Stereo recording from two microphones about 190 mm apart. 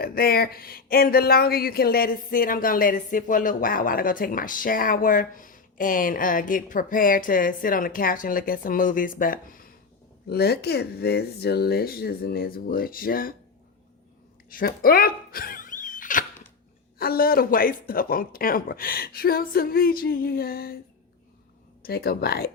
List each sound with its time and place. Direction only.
0.0 s speech: 55° left (ahead or behind)
14.5 s a sound: 50° left (ahead or behind)
17.0 s speech: 50° left (ahead or behind)
21.8 s speech: 55° left (ahead or behind)